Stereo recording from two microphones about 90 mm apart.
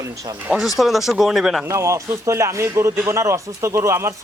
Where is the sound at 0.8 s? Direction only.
5° right (ahead or behind).